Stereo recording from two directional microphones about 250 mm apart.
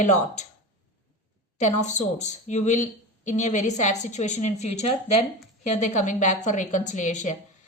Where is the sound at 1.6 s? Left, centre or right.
Left.